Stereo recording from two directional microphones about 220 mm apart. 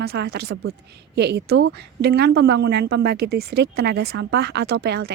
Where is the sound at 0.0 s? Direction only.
45° right (ahead or behind).